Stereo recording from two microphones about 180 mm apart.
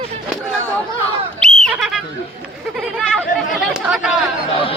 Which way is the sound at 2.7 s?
5° right (ahead or behind).